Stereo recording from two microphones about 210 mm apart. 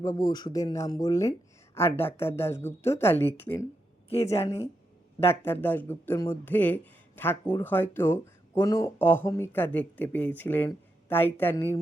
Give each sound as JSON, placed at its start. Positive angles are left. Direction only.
{"t": 0.0, "sound": "speech", "side_deg": 15}